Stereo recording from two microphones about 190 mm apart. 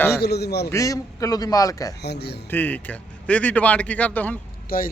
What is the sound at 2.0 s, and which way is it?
Speech, 60° left (ahead or behind).